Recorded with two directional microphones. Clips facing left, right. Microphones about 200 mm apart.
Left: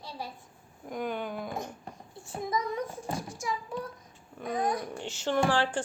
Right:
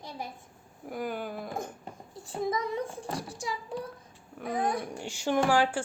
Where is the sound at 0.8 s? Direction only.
5° right (ahead or behind).